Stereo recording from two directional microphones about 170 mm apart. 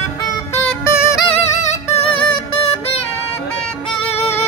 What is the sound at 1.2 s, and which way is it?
Music, 35° left (ahead or behind).